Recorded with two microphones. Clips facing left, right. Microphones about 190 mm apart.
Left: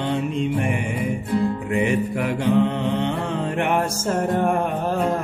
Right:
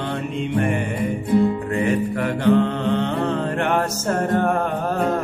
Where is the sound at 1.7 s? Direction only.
15° left (ahead or behind).